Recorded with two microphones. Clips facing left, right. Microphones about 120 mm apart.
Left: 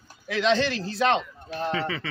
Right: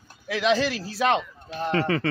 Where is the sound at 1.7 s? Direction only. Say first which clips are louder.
Right 9 dB; 50° right (ahead or behind).